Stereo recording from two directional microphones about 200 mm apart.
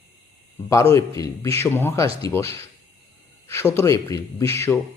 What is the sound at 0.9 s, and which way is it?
Speech, 15° left (ahead or behind).